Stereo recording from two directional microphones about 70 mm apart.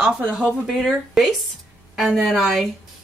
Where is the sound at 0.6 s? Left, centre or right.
Centre.